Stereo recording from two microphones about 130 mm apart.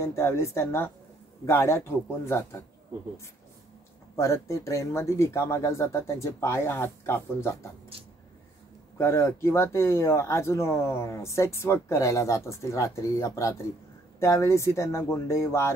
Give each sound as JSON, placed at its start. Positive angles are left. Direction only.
{"t": 0.0, "sound": "speech", "side_deg": 20}
{"t": 4.2, "sound": "speech", "side_deg": 25}
{"t": 8.9, "sound": "speech", "side_deg": 20}